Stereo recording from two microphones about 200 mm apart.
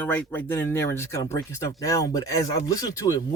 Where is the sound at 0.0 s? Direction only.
10° left (ahead or behind).